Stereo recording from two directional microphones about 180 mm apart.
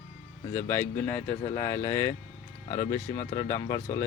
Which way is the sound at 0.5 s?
15° left (ahead or behind).